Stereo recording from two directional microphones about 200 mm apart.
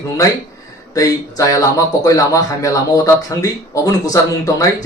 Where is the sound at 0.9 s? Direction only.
15° left (ahead or behind).